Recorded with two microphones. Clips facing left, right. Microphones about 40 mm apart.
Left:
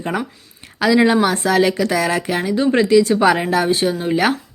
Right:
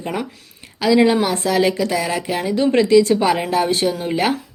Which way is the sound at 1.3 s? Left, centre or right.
Left.